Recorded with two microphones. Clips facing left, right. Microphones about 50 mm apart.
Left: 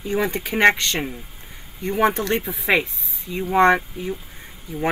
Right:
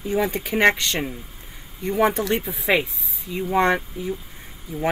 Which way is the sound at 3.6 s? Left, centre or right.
Left.